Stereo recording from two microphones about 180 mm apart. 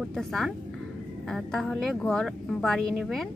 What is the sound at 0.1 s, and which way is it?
A woman's voice, centre (ahead or behind).